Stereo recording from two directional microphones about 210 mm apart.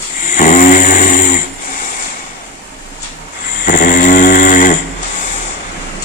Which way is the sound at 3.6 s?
40° left (ahead or behind).